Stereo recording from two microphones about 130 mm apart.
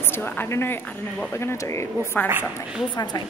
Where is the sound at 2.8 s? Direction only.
30° left (ahead or behind).